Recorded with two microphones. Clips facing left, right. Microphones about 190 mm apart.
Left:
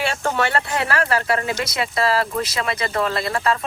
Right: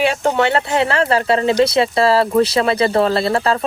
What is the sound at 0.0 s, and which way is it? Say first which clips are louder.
Speech: right 6 dB; 20° right (ahead or behind).